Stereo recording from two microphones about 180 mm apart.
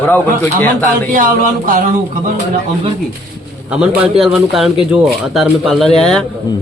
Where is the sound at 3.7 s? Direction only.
5° right (ahead or behind).